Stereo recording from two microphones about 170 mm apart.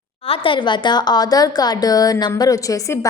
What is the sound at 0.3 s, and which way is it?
Speech, 30° left (ahead or behind).